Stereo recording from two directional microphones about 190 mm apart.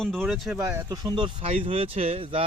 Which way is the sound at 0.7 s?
20° right (ahead or behind).